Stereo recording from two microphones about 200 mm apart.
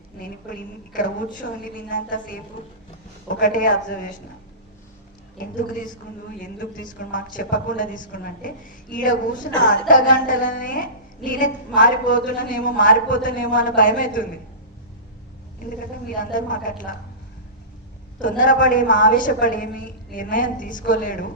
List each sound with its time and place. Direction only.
0.2 s a woman's voice: 40° left (ahead or behind)
5.4 s a woman's voice: 40° left (ahead or behind)
16.0 s a woman's voice: 40° left (ahead or behind)
18.2 s a woman's voice: 40° left (ahead or behind)